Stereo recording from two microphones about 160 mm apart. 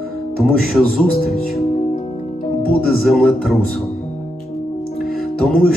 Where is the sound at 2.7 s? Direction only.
Centre (ahead or behind).